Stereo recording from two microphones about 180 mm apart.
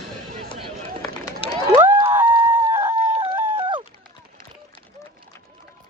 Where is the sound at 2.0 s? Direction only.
10° right (ahead or behind).